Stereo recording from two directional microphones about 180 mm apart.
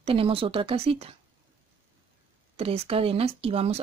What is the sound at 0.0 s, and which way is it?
Speech, 30° right (ahead or behind).